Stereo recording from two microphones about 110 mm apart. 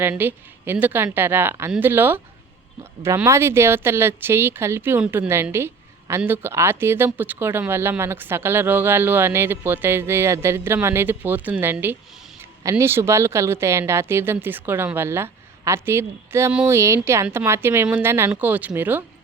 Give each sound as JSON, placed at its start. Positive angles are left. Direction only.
{"t": 0.0, "sound": "speech", "side_deg": -15}
{"t": 3.2, "sound": "speech", "side_deg": -25}